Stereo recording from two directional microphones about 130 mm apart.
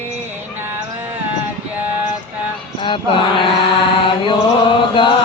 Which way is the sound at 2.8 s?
40° left (ahead or behind).